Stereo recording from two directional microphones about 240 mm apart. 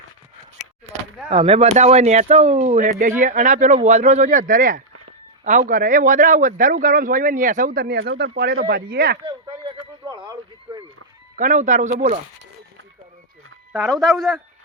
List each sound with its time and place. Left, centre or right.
1.3 s a man's voice: right
10.1 s a sound: centre
11.3 s a man's voice: right
14.1 s speech: centre